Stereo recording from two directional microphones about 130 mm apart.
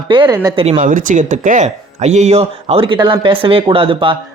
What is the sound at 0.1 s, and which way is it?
Speech, 40° right (ahead or behind).